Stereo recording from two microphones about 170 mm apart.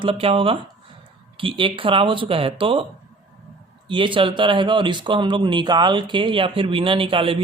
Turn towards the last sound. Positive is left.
turn(degrees=-30)  # may be behind; listen again after turning